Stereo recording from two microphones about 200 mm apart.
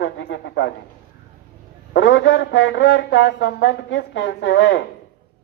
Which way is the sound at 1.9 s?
70° left (ahead or behind).